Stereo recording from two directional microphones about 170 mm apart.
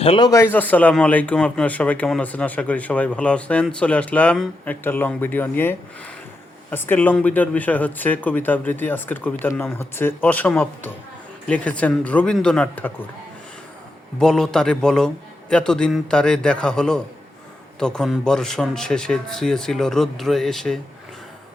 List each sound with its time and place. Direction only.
0.0 s speech: 35° left (ahead or behind)
0.3 s speech: 15° left (ahead or behind)
14.2 s speech: 5° left (ahead or behind)